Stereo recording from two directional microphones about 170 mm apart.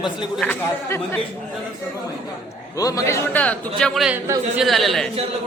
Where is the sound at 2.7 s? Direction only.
20° left (ahead or behind); by 4.2 s centre (ahead or behind).